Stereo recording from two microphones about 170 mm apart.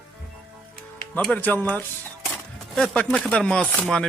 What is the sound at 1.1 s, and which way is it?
Speech, 10° left (ahead or behind).